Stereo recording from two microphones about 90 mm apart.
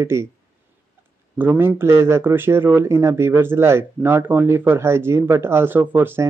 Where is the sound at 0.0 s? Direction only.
30° right (ahead or behind).